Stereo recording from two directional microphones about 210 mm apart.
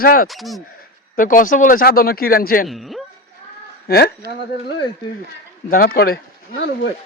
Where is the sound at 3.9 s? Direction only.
45° left (ahead or behind).